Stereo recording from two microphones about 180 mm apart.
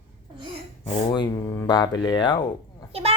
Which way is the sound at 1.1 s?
20° left (ahead or behind).